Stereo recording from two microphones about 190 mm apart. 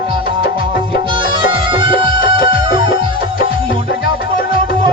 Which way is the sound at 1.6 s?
25° right (ahead or behind).